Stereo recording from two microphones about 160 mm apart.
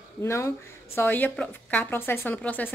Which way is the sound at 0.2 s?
15° left (ahead or behind).